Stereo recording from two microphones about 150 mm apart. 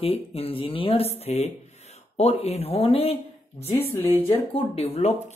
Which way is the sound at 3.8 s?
15° left (ahead or behind).